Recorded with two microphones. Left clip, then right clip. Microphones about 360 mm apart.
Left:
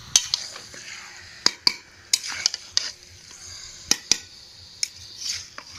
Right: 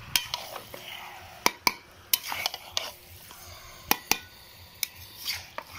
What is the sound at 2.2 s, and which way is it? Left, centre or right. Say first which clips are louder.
Stir: left 5 dB; centre.